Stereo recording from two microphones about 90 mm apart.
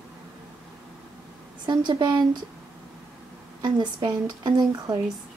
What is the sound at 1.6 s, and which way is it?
Speech, 55° right (ahead or behind).